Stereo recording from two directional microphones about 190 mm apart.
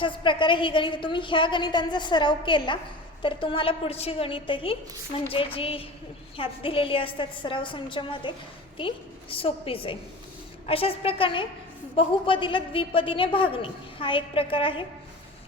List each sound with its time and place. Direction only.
0.0 s a woman's voice: 25° left (ahead or behind)
9.3 s a woman's voice: 30° left (ahead or behind)